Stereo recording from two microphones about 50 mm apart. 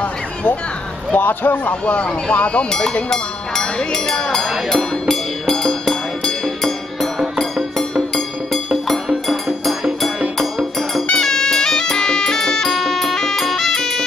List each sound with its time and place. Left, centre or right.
1.1 s speech: left; by 4.7 s centre
5.0 s music: centre